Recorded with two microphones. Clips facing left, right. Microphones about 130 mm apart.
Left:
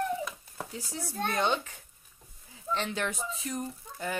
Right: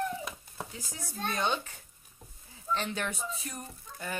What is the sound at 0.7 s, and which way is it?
Speech, 30° left (ahead or behind).